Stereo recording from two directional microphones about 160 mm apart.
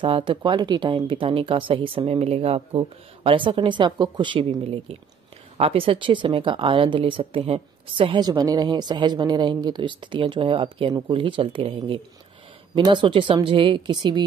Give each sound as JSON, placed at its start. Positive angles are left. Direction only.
{"t": 0.0, "sound": "speech", "side_deg": -30}